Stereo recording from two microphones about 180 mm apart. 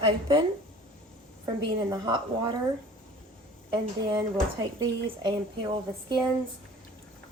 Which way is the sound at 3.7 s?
25° right (ahead or behind).